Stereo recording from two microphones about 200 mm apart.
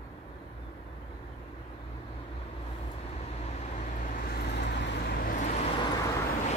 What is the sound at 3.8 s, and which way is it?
Vehicle, 40° left (ahead or behind).